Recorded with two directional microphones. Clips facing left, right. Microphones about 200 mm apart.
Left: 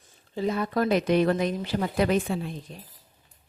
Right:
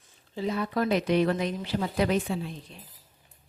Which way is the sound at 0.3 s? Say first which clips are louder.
Left 2 dB; 50° left (ahead or behind).